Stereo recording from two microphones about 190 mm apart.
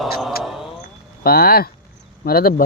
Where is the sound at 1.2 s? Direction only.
50° left (ahead or behind).